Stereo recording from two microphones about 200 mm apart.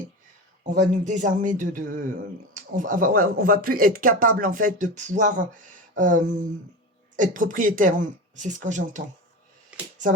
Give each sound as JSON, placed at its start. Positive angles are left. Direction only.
{"t": 0.6, "sound": "a woman's voice", "side_deg": -40}